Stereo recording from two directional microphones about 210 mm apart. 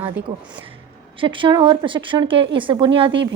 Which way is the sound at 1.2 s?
25° right (ahead or behind).